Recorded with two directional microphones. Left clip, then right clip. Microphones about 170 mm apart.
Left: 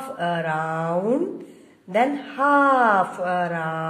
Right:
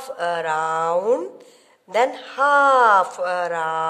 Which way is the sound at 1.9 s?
40° right (ahead or behind).